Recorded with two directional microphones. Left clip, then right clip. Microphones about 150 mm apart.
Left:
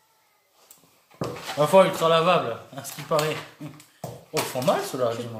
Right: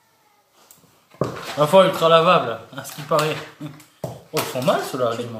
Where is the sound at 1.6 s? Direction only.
20° left (ahead or behind).